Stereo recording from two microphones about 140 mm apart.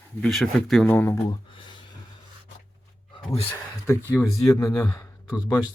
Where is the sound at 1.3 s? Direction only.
35° left (ahead or behind).